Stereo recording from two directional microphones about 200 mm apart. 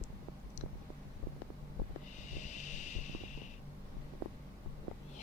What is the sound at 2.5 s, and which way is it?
Vehicle, 35° left (ahead or behind).